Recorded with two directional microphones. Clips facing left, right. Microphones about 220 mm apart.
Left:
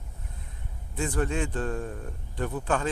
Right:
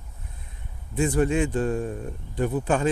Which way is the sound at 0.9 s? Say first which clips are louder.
Right 6 dB; 15° right (ahead or behind).